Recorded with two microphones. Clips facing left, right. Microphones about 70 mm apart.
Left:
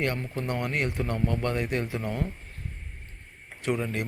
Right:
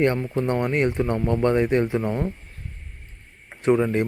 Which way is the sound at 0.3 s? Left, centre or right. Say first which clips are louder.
Right 7 dB; right.